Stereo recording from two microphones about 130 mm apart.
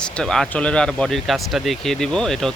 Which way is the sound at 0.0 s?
5° left (ahead or behind).